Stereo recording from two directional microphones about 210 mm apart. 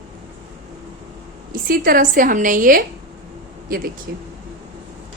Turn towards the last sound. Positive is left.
turn(degrees=-50)  # may be behind; listen again after turning